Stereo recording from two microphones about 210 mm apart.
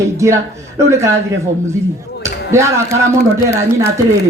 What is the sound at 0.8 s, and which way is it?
Speech, 15° right (ahead or behind).